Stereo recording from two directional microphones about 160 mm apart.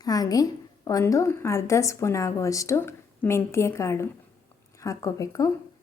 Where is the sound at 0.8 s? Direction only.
20° left (ahead or behind).